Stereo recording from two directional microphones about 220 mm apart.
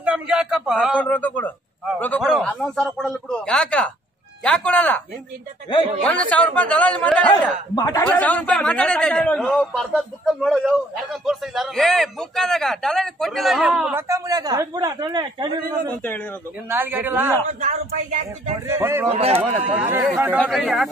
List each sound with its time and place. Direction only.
0.0 s a man's voice: 5° right (ahead or behind)
6.2 s a man's voice: 5° left (ahead or behind)
7.7 s a man's voice: 15° left (ahead or behind); by 15.6 s 20° right (ahead or behind)
16.6 s a man's voice: 10° right (ahead or behind)
17.5 s speech: 35° right (ahead or behind)
18.7 s a man's voice: 10° right (ahead or behind)
19.0 s speech: 25° right (ahead or behind)
19.7 s a man's voice: 5° right (ahead or behind)